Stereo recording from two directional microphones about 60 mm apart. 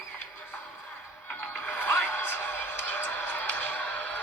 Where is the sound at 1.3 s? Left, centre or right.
Left.